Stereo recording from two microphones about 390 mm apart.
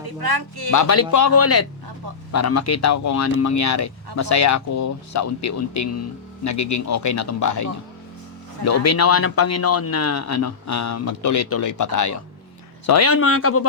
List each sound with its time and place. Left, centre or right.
0.2 s speech: right
0.7 s speech: left